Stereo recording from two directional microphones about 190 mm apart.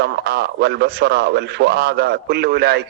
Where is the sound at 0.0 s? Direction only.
60° right (ahead or behind).